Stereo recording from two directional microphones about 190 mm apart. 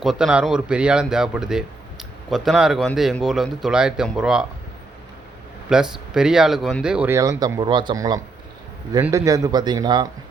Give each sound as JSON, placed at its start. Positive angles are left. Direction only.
{"t": 0.0, "sound": "speech", "side_deg": -5}
{"t": 5.6, "sound": "a man's voice", "side_deg": -5}